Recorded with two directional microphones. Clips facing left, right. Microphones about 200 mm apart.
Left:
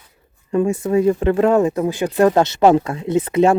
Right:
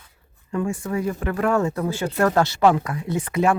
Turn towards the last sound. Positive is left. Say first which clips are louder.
# left 6 dB
turn(degrees=25)  # may be behind; listen again after turning